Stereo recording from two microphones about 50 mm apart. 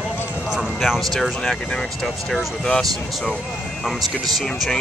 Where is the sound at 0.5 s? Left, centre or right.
Centre.